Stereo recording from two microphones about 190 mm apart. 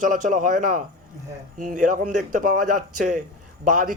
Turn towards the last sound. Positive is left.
turn(degrees=-45)  # may be behind; listen again after turning